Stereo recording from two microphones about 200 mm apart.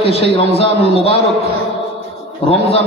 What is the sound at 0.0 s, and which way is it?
A man's voice, 30° left (ahead or behind).